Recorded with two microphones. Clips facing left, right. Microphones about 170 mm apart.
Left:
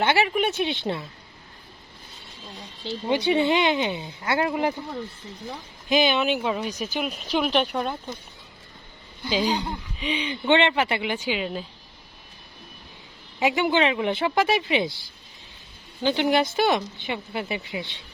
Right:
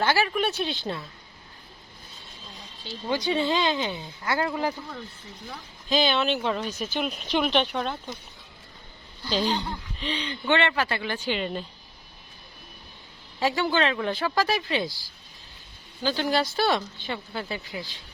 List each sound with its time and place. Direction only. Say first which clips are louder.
0.0 s speech: left 2 dB; 20° left (ahead or behind)
2.8 s speech: left 4 dB; 25° left (ahead or behind); by 8.1 s 5° left (ahead or behind)
9.3 s speech: left 2 dB; 5° left (ahead or behind)
10.4 s speech: left 4 dB; 20° left (ahead or behind)
11.3 s speech: right 2 dB; 5° left (ahead or behind)
13.4 s speech: left 3 dB; 20° left (ahead or behind)
16.0 s speech: left 4 dB; 20° left (ahead or behind)